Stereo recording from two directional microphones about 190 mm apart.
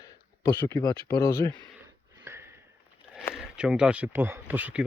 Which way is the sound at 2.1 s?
15° right (ahead or behind).